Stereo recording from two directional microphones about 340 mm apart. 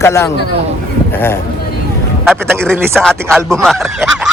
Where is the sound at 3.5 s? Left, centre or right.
Centre.